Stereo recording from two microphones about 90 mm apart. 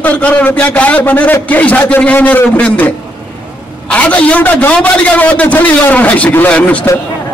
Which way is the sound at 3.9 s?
15° left (ahead or behind).